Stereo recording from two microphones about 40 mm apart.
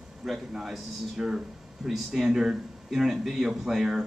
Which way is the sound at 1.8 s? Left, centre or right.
Centre.